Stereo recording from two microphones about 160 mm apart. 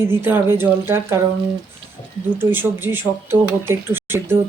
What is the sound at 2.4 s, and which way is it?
Speech, 15° right (ahead or behind).